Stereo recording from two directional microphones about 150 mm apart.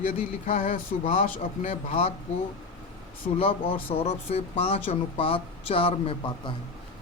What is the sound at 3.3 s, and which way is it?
Speech, 35° left (ahead or behind).